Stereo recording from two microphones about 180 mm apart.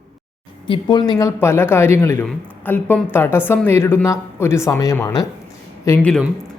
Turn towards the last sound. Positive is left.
turn(degrees=10)  # may be behind; listen again after turning